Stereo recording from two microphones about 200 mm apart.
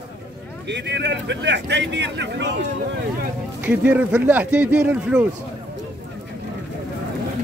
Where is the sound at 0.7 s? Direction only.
60° right (ahead or behind).